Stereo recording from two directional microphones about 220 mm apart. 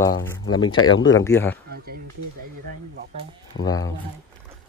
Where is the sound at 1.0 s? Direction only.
15° left (ahead or behind).